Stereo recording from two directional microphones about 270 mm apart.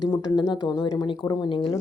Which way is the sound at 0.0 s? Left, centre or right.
Centre.